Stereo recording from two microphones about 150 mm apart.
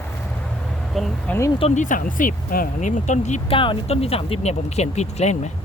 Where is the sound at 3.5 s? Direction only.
35° left (ahead or behind).